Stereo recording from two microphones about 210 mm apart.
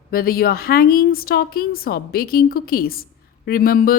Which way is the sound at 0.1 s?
45° left (ahead or behind).